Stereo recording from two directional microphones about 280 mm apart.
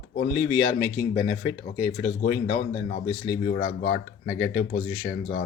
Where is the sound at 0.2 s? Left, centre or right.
Left.